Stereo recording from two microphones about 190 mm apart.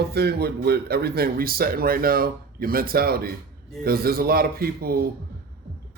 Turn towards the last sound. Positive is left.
turn(degrees=-55)  # may be behind; listen again after turning